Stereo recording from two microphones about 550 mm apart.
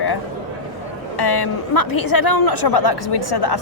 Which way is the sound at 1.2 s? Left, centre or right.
Left.